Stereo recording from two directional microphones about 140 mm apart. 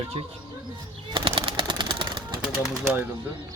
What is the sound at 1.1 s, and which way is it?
Machine gun, 40° right (ahead or behind).